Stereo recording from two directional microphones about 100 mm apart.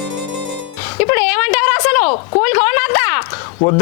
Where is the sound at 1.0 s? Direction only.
25° left (ahead or behind).